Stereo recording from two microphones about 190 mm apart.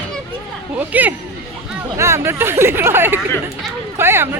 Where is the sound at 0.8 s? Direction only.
10° right (ahead or behind).